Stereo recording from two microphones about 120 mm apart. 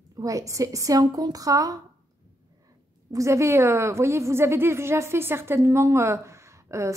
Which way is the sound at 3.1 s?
25° right (ahead or behind).